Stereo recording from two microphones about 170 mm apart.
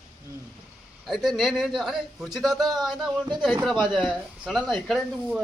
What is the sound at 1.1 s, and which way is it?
A man's voice, centre (ahead or behind).